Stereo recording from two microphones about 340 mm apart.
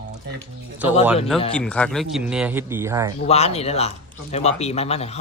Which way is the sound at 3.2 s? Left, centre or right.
Centre.